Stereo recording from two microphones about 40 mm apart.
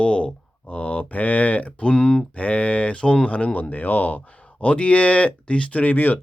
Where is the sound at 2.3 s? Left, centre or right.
Left.